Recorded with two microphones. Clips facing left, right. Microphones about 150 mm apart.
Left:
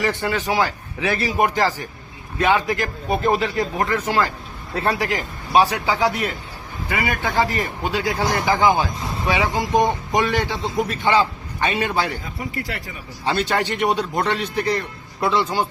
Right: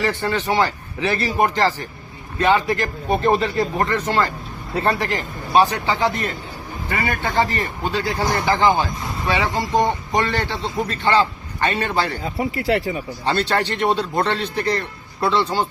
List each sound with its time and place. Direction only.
0.0 s speech: 15° left (ahead or behind)
12.6 s speech: 35° right (ahead or behind)
13.2 s speech: 10° left (ahead or behind)